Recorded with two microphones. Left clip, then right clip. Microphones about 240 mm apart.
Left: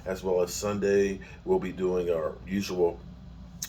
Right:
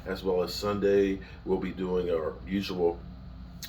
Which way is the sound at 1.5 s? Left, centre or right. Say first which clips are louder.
Left 3 dB; left.